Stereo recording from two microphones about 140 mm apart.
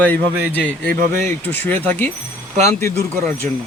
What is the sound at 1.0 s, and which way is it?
Speech, 60° right (ahead or behind).